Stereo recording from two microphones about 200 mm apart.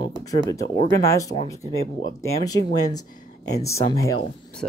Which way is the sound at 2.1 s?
20° left (ahead or behind).